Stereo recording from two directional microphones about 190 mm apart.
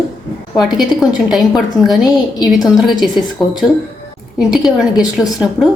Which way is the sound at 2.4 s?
Centre (ahead or behind).